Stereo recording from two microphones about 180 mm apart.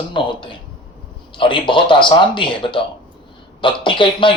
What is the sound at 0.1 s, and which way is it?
Speech, 25° left (ahead or behind).